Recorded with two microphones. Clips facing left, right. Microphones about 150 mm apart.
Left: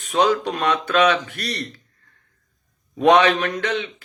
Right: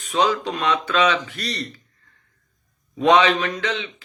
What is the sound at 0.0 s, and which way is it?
Speech, 50° left (ahead or behind).